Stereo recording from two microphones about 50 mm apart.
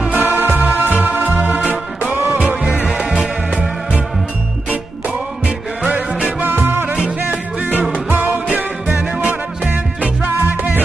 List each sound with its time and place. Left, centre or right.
0.2 s music: right
5.9 s music: right
6.4 s music: right
8.1 s music: right